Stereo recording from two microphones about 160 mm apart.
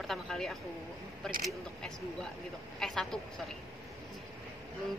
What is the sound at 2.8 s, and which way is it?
Speech, 5° left (ahead or behind).